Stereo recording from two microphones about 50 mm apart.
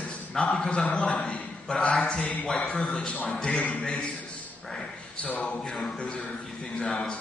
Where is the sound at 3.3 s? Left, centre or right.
Centre.